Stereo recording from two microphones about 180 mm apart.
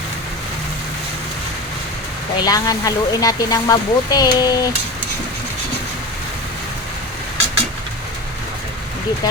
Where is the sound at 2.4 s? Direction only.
20° left (ahead or behind).